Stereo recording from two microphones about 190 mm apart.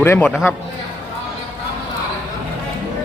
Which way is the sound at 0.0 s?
10° left (ahead or behind).